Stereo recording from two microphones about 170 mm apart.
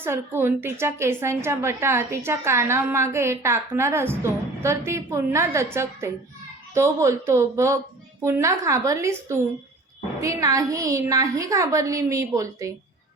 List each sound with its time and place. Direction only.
0.0 s a woman's voice: 15° right (ahead or behind)